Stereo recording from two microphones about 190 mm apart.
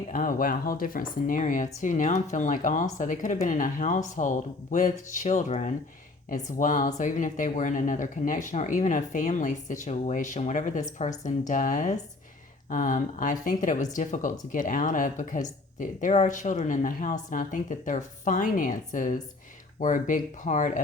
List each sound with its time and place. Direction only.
0.1 s speech: 45° left (ahead or behind)